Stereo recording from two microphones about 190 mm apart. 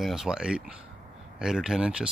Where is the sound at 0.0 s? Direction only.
Centre (ahead or behind).